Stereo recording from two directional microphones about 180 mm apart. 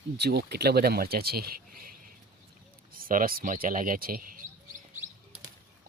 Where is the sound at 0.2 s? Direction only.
65° right (ahead or behind).